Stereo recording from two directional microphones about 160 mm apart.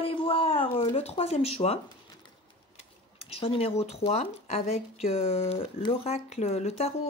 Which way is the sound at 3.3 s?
35° left (ahead or behind).